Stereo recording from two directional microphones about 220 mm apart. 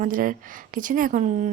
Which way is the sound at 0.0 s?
40° right (ahead or behind).